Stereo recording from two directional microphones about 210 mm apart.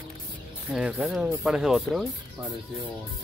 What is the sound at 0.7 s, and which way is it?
Speech, 5° right (ahead or behind).